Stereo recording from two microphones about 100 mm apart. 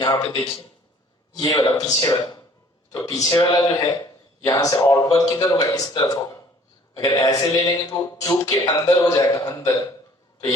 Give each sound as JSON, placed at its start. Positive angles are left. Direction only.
{"t": 0.0, "sound": "a man's voice", "side_deg": 40}
{"t": 3.2, "sound": "a man's voice", "side_deg": 50}